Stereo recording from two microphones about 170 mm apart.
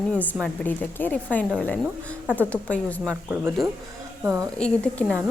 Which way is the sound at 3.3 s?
15° right (ahead or behind).